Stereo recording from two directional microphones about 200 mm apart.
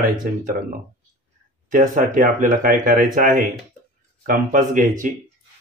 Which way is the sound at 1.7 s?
40° right (ahead or behind).